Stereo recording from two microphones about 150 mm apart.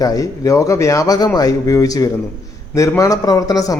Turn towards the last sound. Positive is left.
turn(degrees=25)  # may be behind; listen again after turning